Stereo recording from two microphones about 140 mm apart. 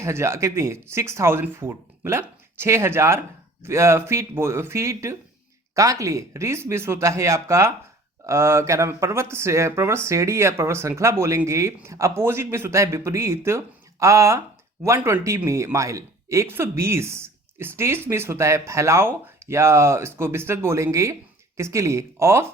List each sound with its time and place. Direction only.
0.0 s speech: 20° right (ahead or behind)